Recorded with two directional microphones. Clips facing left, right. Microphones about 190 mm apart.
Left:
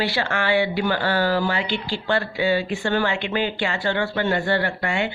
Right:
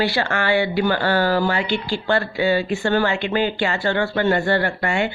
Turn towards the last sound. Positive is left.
turn(degrees=-45)  # may be behind; listen again after turning